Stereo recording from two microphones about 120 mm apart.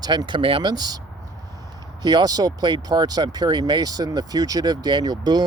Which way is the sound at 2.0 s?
35° right (ahead or behind).